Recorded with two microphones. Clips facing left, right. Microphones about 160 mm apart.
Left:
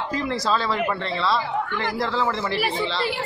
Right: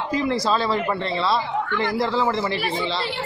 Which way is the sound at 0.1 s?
10° right (ahead or behind).